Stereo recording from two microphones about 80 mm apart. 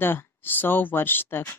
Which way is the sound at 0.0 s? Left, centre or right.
Left.